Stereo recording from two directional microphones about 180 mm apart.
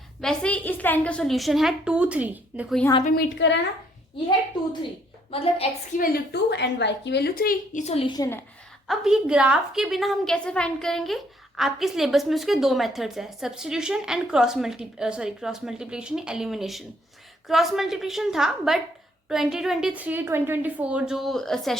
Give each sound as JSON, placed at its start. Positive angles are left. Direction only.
{"t": 0.2, "sound": "a woman's voice", "side_deg": 5}
{"t": 3.2, "sound": "a woman's voice", "side_deg": 75}
{"t": 5.3, "sound": "a woman's voice", "side_deg": 35}
{"t": 6.0, "sound": "a woman's voice", "side_deg": 70}
{"t": 8.9, "sound": "a woman's voice", "side_deg": -5}